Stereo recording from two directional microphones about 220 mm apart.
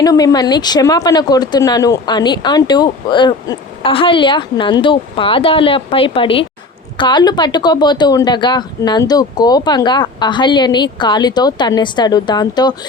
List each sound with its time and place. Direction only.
0.0 s speech: 15° left (ahead or behind)